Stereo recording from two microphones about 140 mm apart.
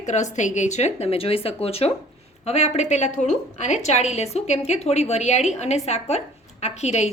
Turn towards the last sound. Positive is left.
turn(degrees=55)  # may be behind; listen again after turning